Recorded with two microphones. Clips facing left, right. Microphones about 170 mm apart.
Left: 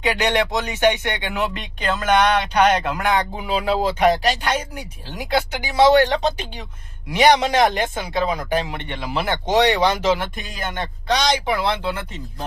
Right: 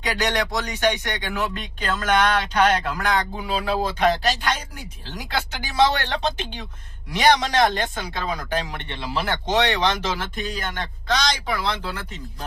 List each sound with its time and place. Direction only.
0.0 s speech: 20° left (ahead or behind)